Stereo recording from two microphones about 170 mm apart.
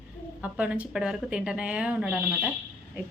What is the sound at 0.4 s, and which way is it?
Speech, 5° right (ahead or behind).